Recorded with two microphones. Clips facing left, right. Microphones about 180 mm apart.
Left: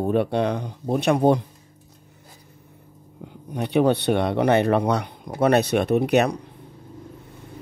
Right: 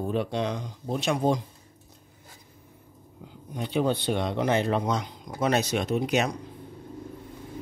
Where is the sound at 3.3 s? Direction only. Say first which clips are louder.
Left 6 dB; 65° left (ahead or behind).